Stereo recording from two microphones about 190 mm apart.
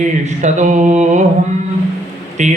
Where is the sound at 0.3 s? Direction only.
40° right (ahead or behind).